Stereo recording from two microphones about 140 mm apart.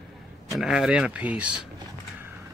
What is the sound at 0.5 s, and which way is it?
Speech, 5° right (ahead or behind).